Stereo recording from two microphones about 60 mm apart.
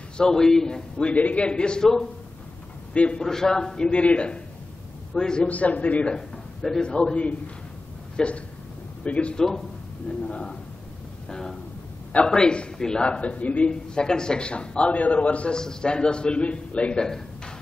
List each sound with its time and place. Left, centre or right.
0.2 s a man's voice: centre
2.9 s a man's voice: centre
5.5 s a man's voice: left
6.1 s a man's voice: centre